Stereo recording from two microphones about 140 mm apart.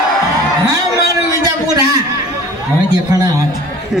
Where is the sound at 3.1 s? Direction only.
25° right (ahead or behind).